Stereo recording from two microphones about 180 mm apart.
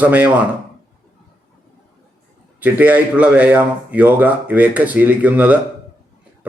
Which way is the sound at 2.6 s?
10° right (ahead or behind).